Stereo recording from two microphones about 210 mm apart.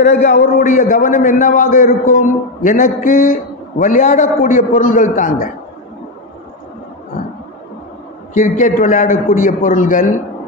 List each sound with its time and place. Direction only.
0.0 s a man's voice: 35° left (ahead or behind)
8.4 s a man's voice: 40° left (ahead or behind)